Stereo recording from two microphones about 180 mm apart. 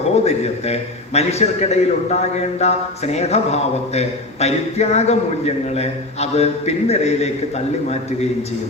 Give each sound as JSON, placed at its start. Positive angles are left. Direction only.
{"t": 0.3, "sound": "a man's voice", "side_deg": 35}